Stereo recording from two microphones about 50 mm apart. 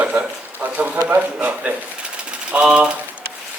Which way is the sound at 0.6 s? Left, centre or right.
Right.